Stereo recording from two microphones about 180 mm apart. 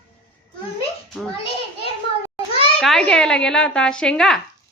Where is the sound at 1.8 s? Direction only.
30° left (ahead or behind).